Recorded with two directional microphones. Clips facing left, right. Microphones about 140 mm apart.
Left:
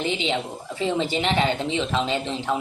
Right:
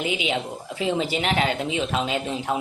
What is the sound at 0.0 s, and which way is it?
Speech, 10° right (ahead or behind).